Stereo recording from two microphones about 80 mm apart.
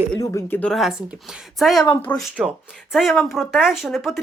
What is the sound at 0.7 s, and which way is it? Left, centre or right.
Speech, centre.